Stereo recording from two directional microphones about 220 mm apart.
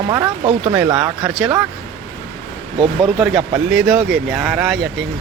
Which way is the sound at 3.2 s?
Centre (ahead or behind).